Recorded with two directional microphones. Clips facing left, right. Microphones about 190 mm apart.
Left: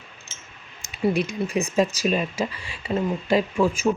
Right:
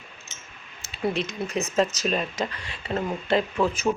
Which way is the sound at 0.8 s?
10° left (ahead or behind).